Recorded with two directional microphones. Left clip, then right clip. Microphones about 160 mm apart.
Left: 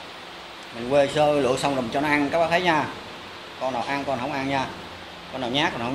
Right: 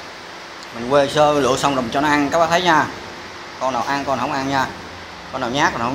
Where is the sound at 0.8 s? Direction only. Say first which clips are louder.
Right 5 dB; 5° left (ahead or behind).